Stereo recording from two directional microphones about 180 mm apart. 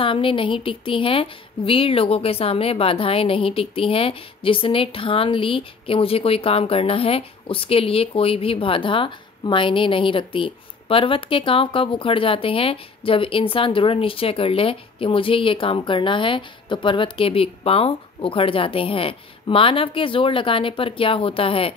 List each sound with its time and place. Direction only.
0.0 s a woman's voice: 30° left (ahead or behind)